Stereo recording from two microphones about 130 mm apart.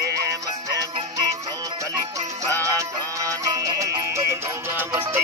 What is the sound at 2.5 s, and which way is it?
Music, 25° right (ahead or behind).